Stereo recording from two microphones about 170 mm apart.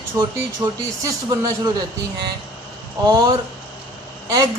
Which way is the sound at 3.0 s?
20° right (ahead or behind).